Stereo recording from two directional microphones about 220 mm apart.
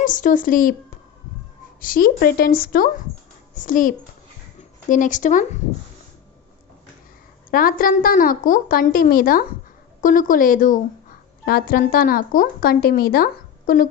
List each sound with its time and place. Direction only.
0.0 s a woman's voice: 35° left (ahead or behind)
7.5 s a woman's voice: 40° left (ahead or behind)